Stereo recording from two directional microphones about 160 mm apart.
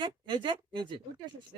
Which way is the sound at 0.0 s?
30° right (ahead or behind).